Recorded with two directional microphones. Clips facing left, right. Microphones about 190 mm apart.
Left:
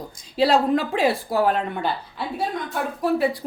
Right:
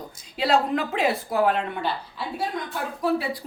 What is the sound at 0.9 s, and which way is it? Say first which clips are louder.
Speech: left 2 dB; 35° left (ahead or behind).